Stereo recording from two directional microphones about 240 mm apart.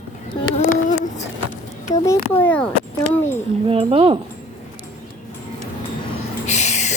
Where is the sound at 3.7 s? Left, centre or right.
Right.